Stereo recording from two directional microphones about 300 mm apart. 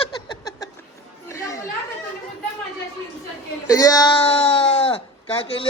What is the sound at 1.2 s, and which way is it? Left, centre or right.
Chatter, centre.